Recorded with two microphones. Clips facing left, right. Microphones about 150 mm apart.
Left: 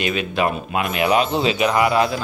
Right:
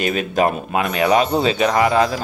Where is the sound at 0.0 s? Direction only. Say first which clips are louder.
Right 3 dB; 40° right (ahead or behind).